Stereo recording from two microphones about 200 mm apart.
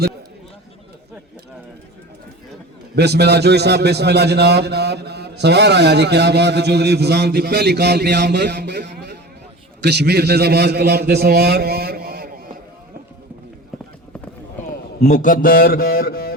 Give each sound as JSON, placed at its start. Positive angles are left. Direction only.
{"t": 2.9, "sound": "a man's voice", "side_deg": -55}
{"t": 15.0, "sound": "speech", "side_deg": 40}